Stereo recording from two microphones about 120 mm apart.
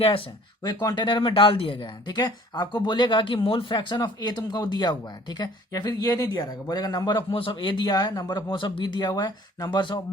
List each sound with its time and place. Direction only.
0.0 s speech: 50° left (ahead or behind)
0.6 s speech: 35° left (ahead or behind)
7.3 s speech: 45° left (ahead or behind)